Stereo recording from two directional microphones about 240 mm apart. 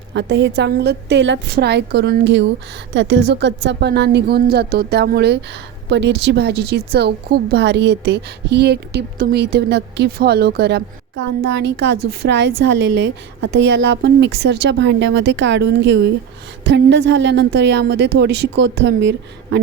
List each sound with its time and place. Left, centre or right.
0.1 s a woman's voice: right